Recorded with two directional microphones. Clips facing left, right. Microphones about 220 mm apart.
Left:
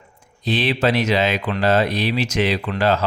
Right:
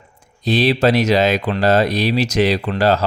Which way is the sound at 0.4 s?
40° right (ahead or behind).